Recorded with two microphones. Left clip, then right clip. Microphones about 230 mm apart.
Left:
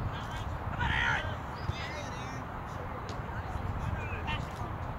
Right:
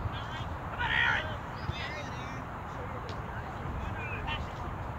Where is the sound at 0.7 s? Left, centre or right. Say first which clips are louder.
Right 2 dB; left.